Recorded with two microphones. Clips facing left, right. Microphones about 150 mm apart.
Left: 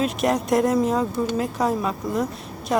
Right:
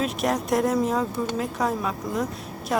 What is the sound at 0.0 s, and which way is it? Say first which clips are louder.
Speech: left 3 dB; centre (ahead or behind).